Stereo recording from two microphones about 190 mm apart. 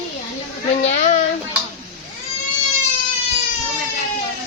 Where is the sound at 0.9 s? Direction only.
40° left (ahead or behind).